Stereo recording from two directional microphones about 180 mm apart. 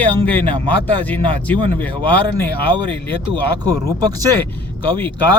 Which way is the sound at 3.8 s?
20° right (ahead or behind).